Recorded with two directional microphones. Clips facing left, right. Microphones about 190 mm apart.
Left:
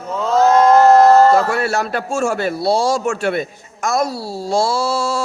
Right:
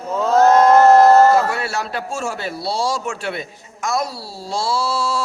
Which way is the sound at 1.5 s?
50° left (ahead or behind).